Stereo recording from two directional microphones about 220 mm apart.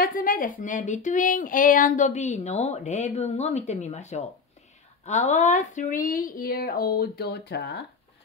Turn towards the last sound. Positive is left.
turn(degrees=50)  # may be behind; listen again after turning